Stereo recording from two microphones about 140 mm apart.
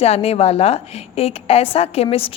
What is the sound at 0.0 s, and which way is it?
A woman's voice, 45° left (ahead or behind).